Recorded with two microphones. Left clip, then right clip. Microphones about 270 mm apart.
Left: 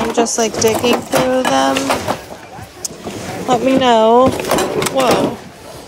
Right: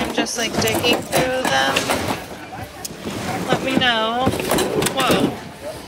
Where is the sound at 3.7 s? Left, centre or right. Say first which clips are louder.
Left 9 dB; left.